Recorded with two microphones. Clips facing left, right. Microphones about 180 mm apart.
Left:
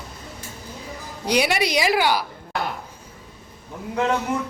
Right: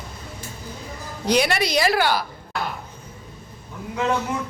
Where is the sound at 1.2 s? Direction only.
10° left (ahead or behind).